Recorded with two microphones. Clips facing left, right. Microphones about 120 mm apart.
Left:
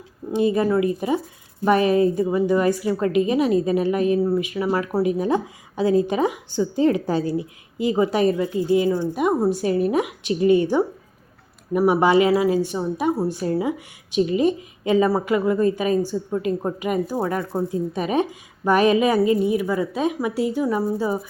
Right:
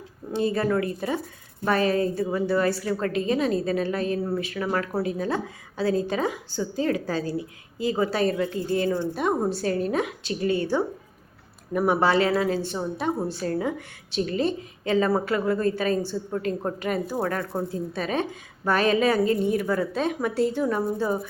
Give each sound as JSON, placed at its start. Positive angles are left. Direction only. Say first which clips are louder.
{"t": 0.3, "sound": "a woman's voice", "louder": "left 4 dB", "side_deg": 15}